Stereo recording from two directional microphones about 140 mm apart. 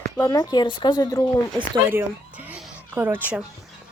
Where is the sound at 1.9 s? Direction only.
15° right (ahead or behind).